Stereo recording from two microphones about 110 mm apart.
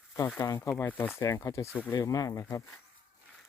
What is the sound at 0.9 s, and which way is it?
Speech, 20° left (ahead or behind).